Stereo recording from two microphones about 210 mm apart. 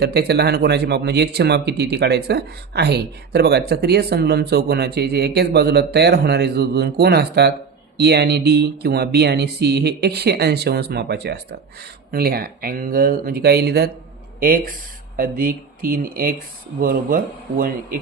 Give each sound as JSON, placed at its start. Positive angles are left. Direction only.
{"t": 0.1, "sound": "speech", "side_deg": -50}